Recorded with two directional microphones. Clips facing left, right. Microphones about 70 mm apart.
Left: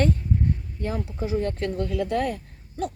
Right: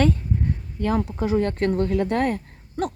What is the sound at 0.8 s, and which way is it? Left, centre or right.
Speech, right.